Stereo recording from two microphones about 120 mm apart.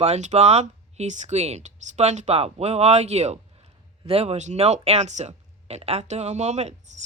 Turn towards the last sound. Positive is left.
turn(degrees=-70)  # may be behind; listen again after turning